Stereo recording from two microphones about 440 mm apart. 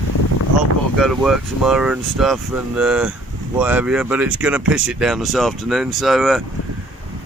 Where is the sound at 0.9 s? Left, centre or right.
Centre.